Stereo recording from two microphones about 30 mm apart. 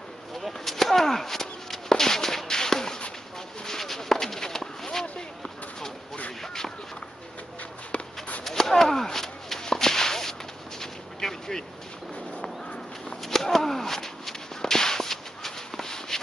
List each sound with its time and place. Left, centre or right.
0.4 s whip: centre
3.6 s a sound: centre
6.4 s a sound: centre
8.5 s whip: centre
10.8 s artillery fire: centre
13.2 s whip: centre